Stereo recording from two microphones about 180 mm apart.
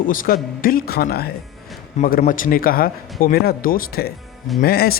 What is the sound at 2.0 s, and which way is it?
A man's voice, 45° left (ahead or behind).